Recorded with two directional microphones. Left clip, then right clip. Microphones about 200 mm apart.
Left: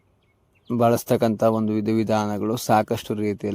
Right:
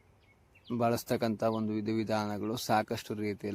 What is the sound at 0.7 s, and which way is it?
Speech, 45° left (ahead or behind).